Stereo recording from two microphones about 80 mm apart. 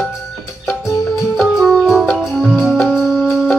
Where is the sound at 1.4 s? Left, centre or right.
Centre.